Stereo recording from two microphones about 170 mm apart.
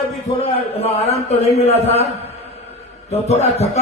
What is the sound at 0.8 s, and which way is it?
A man's voice, 35° left (ahead or behind).